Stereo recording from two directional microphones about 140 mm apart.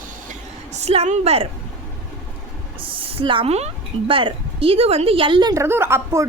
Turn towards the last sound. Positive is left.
turn(degrees=-20)  # may be behind; listen again after turning